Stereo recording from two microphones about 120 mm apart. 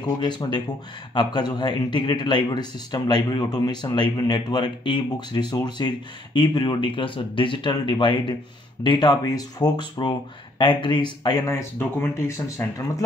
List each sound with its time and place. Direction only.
0.2 s a man's voice: 40° left (ahead or behind)